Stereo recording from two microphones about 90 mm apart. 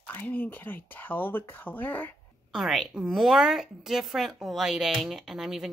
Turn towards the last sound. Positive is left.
turn(degrees=-5)  # may be behind; listen again after turning